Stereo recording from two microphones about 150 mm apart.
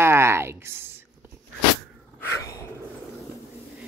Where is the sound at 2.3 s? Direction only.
20° left (ahead or behind).